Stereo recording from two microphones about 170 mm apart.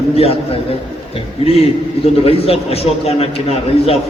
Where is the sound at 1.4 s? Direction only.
35° left (ahead or behind).